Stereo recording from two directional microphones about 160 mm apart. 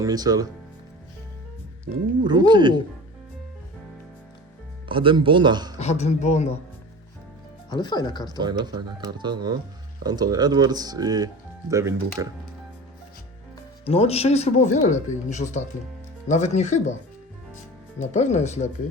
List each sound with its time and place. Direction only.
0.0 s speech: 25° right (ahead or behind)
2.2 s speech: 25° right (ahead or behind)
4.9 s speech: 30° right (ahead or behind)
5.8 s speech: 45° left (ahead or behind)
7.7 s speech: 25° left (ahead or behind)
8.4 s speech: 25° right (ahead or behind)
13.8 s speech: 40° left (ahead or behind)
18.1 s speech: 45° left (ahead or behind)